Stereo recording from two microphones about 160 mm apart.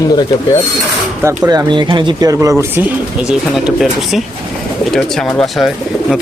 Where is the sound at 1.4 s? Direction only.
25° right (ahead or behind).